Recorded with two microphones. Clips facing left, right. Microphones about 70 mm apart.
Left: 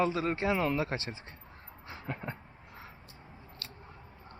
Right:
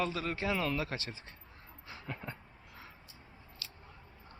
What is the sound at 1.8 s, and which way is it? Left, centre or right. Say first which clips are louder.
Dog: left 4 dB; left.